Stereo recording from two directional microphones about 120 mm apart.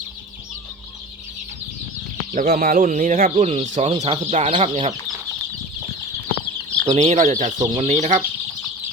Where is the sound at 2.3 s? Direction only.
90° right; by 4.5 s 65° right (ahead or behind).